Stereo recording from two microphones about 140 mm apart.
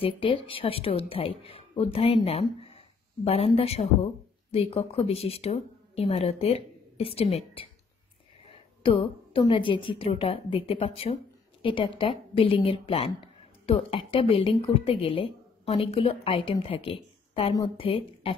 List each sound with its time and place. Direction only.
0.0 s a woman's voice: 40° left (ahead or behind)
8.8 s a woman's voice: 40° left (ahead or behind)